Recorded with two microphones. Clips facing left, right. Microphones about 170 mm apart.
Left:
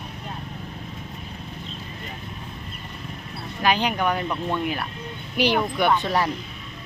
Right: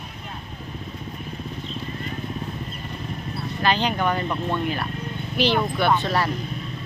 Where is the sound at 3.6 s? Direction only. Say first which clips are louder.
Even; 10° left (ahead or behind).